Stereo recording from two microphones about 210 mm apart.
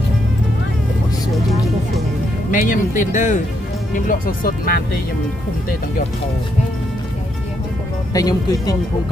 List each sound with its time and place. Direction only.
2.5 s speech: 40° left (ahead or behind)
8.1 s speech: 15° left (ahead or behind)